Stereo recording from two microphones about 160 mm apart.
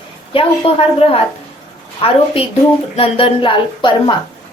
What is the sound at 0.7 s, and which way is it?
Speech, 40° left (ahead or behind).